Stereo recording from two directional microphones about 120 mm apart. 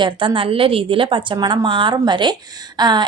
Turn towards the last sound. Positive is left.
turn(degrees=-35)  # may be behind; listen again after turning